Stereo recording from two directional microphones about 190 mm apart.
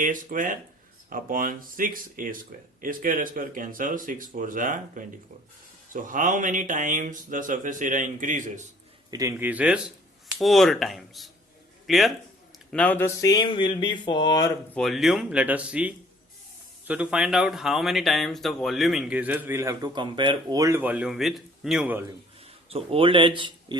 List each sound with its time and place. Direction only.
0.0 s speech: 45° right (ahead or behind)
9.0 s speech: 15° right (ahead or behind); by 13.3 s 10° left (ahead or behind)
13.3 s speech: 25° left (ahead or behind)
14.7 s speech: centre (ahead or behind)
22.7 s speech: 30° right (ahead or behind)